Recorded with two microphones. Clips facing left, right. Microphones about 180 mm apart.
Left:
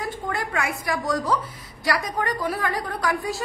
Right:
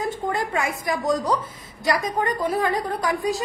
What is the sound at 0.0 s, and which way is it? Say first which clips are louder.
A woman's voice: right 3 dB; 25° right (ahead or behind).